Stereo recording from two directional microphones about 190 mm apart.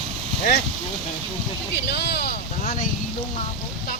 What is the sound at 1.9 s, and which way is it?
Speech, 60° left (ahead or behind).